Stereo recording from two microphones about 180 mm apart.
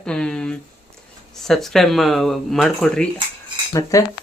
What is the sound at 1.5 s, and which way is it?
Speech, centre (ahead or behind).